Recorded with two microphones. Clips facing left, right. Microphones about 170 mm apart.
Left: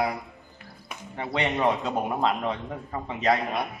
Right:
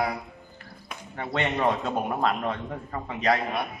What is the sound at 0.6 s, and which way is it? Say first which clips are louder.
Music: left 1 dB; centre (ahead or behind).